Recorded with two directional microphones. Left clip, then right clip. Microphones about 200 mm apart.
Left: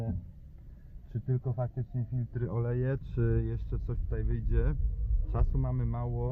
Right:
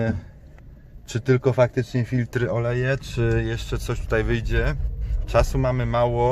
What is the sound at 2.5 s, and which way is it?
Speech, 5° right (ahead or behind).